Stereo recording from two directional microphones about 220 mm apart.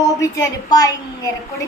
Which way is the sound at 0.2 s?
15° left (ahead or behind).